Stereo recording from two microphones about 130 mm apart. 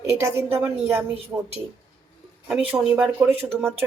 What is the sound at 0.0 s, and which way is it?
Speech, 20° right (ahead or behind).